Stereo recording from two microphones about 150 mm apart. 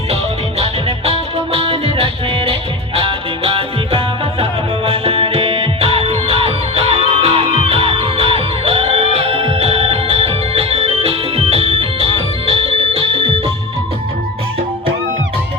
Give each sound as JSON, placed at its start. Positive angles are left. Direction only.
{"t": 0.6, "sound": "music", "side_deg": -40}